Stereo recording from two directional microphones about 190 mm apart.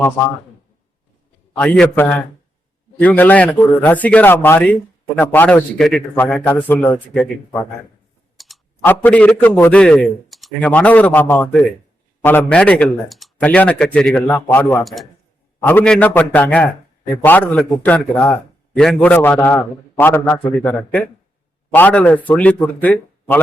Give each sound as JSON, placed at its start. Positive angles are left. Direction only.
{"t": 1.5, "sound": "a man's voice", "side_deg": 5}
{"t": 8.4, "sound": "clicking", "side_deg": 0}
{"t": 8.8, "sound": "a man's voice", "side_deg": 10}